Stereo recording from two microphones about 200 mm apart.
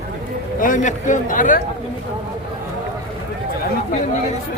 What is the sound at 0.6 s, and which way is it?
A man's voice, 40° left (ahead or behind).